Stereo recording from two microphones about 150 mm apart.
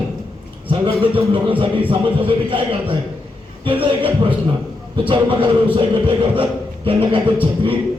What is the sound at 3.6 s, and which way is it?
A man's voice, 35° right (ahead or behind).